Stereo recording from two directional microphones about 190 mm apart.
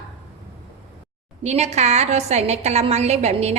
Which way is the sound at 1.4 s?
35° right (ahead or behind).